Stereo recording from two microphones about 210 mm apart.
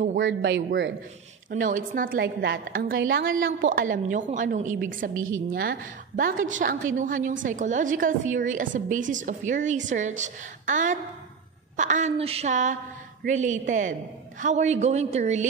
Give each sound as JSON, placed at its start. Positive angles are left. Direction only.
{"t": 0.2, "sound": "speech", "side_deg": -60}
{"t": 1.5, "sound": "a woman's voice", "side_deg": -40}